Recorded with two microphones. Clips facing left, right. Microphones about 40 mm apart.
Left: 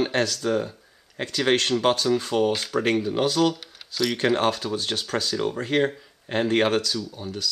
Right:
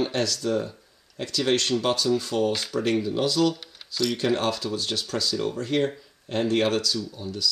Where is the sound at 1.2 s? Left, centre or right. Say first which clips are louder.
Left 2 dB; left.